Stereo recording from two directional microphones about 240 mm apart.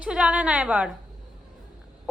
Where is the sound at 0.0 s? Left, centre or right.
Centre.